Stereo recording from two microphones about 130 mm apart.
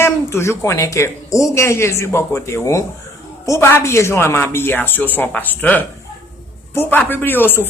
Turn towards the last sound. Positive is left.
turn(degrees=15)  # may be behind; listen again after turning